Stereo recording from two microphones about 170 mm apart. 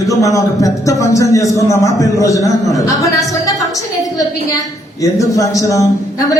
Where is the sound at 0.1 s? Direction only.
20° left (ahead or behind).